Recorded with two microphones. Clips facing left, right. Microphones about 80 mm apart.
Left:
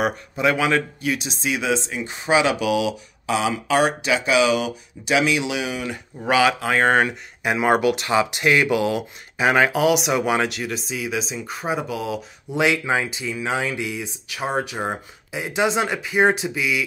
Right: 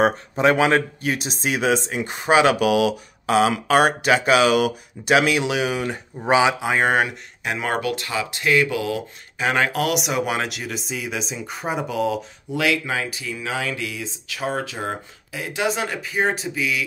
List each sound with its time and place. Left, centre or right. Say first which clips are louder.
0.0 s speech: right 3 dB; right
6.2 s speech: right 1 dB; right
6.7 s speech: left 1 dB; centre
7.4 s speech: left 5 dB; centre
9.5 s speech: left 4 dB; centre
12.5 s speech: left 2 dB; left
16.0 s speech: left 4 dB; centre